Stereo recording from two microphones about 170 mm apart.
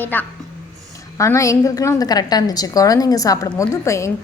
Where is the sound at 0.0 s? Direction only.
10° left (ahead or behind).